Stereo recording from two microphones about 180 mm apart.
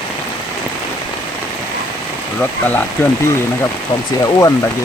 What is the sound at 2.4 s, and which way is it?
Speech, 10° left (ahead or behind).